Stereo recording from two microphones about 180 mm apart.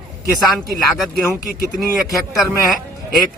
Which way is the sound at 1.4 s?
50° left (ahead or behind).